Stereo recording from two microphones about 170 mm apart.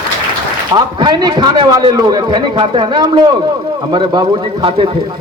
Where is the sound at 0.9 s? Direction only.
25° right (ahead or behind).